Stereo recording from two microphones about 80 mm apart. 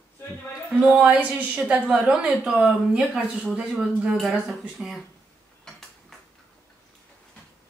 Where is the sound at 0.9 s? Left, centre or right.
Centre.